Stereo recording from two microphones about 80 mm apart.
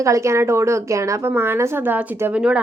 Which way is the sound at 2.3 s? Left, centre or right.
Centre.